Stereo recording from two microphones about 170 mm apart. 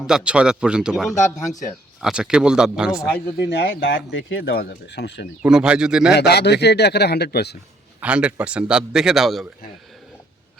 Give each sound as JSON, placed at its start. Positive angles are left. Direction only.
{"t": 0.0, "sound": "a man's voice", "side_deg": -5}
{"t": 3.4, "sound": "speech", "side_deg": 90}
{"t": 5.4, "sound": "a man's voice", "side_deg": -5}
{"t": 6.1, "sound": "speech", "side_deg": 75}
{"t": 8.0, "sound": "a man's voice", "side_deg": -5}